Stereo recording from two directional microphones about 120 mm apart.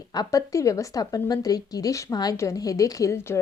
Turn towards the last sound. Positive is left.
turn(degrees=20)  # may be behind; listen again after turning